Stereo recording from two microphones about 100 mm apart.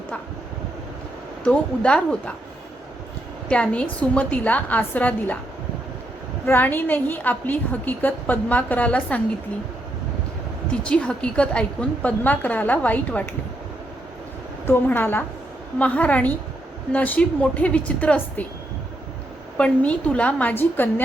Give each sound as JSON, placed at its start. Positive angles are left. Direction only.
{"t": 1.5, "sound": "a woman's voice", "side_deg": 10}
{"t": 3.5, "sound": "a woman's voice", "side_deg": 10}
{"t": 6.4, "sound": "a woman's voice", "side_deg": 20}
{"t": 10.7, "sound": "a woman's voice", "side_deg": 10}
{"t": 14.8, "sound": "a woman's voice", "side_deg": 20}
{"t": 19.5, "sound": "a woman's voice", "side_deg": 10}